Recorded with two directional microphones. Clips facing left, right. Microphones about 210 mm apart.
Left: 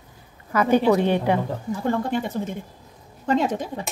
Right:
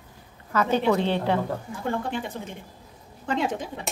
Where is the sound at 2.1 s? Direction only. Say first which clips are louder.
Left 7 dB; 40° left (ahead or behind).